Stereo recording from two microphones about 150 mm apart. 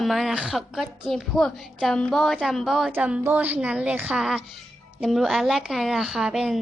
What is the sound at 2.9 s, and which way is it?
A woman's voice, 10° right (ahead or behind).